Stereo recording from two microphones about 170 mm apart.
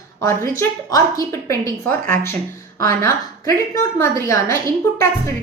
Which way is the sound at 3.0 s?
20° left (ahead or behind).